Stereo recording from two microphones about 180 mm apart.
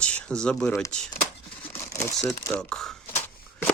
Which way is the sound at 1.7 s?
15° left (ahead or behind).